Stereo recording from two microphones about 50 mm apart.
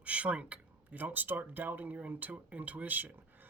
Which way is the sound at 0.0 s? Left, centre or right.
Right.